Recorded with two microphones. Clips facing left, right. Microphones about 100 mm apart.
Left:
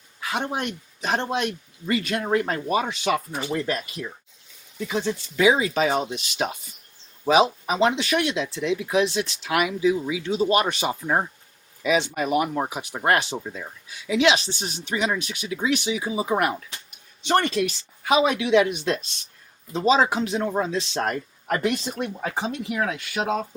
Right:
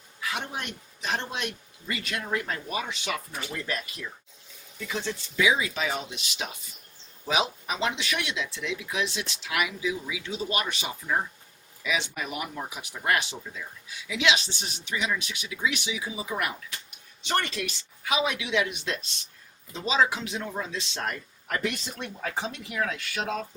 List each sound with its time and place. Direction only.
0.2 s speech: 40° left (ahead or behind); by 5.1 s 25° left (ahead or behind)
5.4 s speech: 40° left (ahead or behind); by 23.5 s 20° left (ahead or behind)